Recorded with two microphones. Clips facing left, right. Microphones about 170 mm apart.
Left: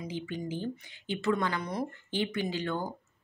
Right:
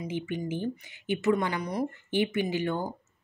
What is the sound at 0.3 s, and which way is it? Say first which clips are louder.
Speech: right 2 dB; 20° right (ahead or behind).